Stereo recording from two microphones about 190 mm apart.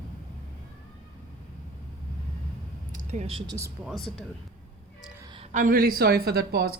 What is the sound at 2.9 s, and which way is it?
Speech, 35° right (ahead or behind).